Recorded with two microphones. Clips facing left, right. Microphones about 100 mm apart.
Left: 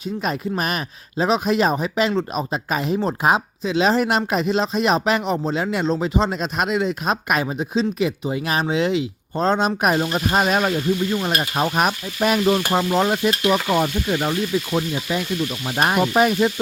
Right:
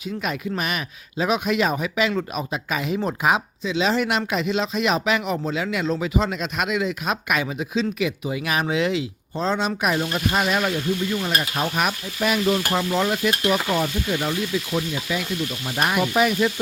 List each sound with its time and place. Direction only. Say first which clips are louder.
0.2 s speech: left 3 dB; 35° left (ahead or behind)
9.3 s speech: left 4 dB; 45° left (ahead or behind)
10.0 s speech: left 3 dB; 30° left (ahead or behind)
15.1 s speech: left 3 dB; 40° left (ahead or behind)
15.6 s speech: left 3 dB; 30° left (ahead or behind)